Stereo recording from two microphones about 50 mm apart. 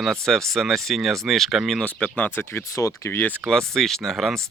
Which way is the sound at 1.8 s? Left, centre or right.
Left.